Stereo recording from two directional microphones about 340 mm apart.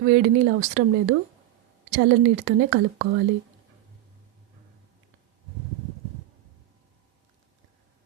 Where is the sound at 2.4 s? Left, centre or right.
Right.